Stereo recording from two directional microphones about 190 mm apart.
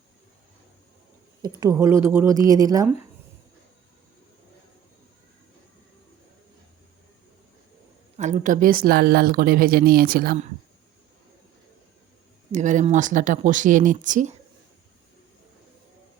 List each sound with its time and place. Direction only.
1.4 s a woman's voice: 20° right (ahead or behind)
8.1 s speech: 40° right (ahead or behind)
12.5 s speech: 40° right (ahead or behind)